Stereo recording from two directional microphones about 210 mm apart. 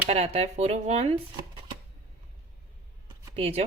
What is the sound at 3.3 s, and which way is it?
Speech, 30° right (ahead or behind).